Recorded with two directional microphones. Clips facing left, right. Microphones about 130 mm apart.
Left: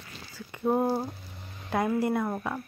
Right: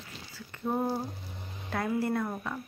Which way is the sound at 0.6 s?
30° left (ahead or behind).